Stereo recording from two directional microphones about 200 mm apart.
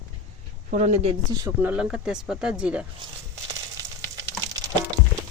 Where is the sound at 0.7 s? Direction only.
40° right (ahead or behind).